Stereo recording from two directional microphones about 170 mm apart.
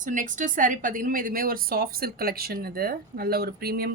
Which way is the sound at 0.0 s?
50° right (ahead or behind).